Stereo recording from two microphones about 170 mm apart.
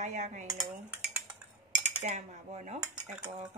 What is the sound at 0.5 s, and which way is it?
Cutlery, 10° right (ahead or behind).